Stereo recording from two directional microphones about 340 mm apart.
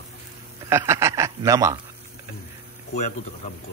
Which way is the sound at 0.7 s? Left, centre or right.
Centre.